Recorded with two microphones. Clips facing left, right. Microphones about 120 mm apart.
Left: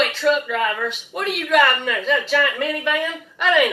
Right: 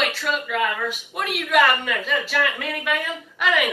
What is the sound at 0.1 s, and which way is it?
Speech, 5° right (ahead or behind).